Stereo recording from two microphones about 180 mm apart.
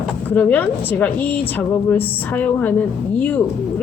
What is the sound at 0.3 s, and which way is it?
A woman's voice, 10° left (ahead or behind).